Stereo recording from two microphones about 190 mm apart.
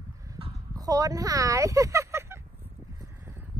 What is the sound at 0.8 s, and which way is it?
Speech, 20° right (ahead or behind).